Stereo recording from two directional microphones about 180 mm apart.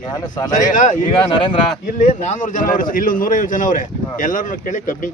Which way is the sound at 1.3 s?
30° left (ahead or behind).